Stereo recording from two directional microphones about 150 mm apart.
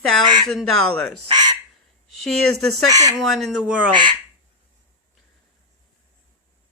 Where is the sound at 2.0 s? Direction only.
5° left (ahead or behind).